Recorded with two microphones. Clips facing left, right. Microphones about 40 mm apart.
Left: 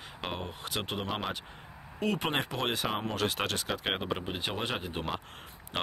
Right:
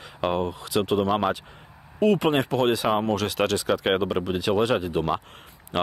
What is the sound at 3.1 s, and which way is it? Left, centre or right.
Speech, right.